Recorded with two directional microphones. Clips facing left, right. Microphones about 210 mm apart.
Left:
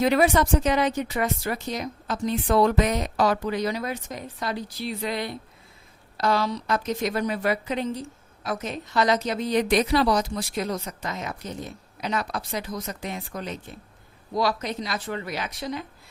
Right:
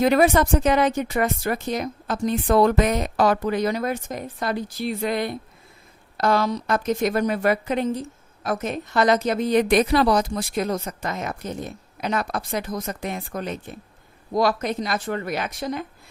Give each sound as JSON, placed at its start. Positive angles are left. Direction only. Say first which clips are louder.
{"t": 0.0, "sound": "speech", "louder": "right 3 dB", "side_deg": -50}